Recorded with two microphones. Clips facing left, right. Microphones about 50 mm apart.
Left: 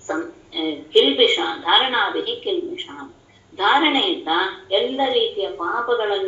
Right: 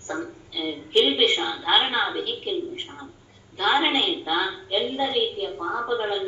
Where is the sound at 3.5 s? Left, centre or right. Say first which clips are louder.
Left 5 dB; left.